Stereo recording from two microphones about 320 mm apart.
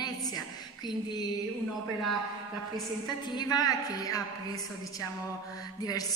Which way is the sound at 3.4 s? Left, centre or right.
Centre.